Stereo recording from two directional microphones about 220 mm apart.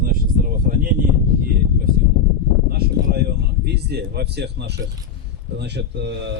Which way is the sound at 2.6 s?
45° right (ahead or behind).